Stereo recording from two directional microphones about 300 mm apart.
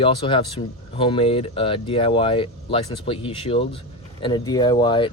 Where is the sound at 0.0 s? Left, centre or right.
Centre.